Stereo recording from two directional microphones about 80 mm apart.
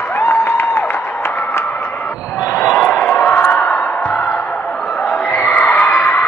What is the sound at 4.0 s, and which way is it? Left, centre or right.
Music, centre.